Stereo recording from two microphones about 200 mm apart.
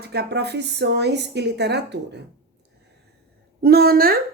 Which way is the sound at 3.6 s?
50° right (ahead or behind).